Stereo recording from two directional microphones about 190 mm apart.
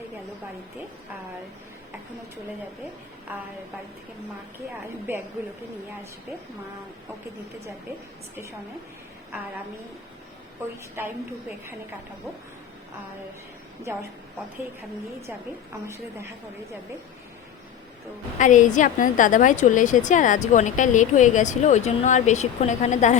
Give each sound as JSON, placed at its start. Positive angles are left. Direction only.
{"t": 3.3, "sound": "a woman's voice", "side_deg": -10}
{"t": 5.1, "sound": "a woman's voice", "side_deg": -10}
{"t": 11.0, "sound": "a woman's voice", "side_deg": -10}
{"t": 18.3, "sound": "a woman's voice", "side_deg": 40}